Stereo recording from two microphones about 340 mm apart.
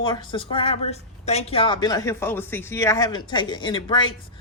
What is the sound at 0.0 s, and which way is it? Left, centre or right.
Speech, centre.